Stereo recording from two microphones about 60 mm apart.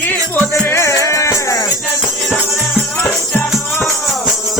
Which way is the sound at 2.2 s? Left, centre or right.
Centre.